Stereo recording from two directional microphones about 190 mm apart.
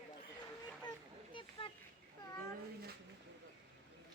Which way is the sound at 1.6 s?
30° left (ahead or behind).